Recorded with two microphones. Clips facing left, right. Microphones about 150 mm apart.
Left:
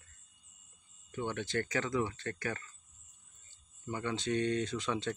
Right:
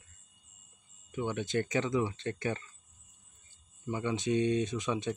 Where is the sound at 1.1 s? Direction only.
15° right (ahead or behind).